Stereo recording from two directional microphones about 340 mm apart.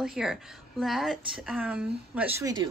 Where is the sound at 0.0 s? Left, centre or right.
Centre.